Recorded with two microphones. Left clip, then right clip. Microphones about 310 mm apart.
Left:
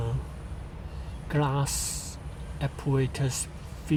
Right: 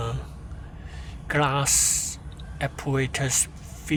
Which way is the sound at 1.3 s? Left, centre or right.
Right.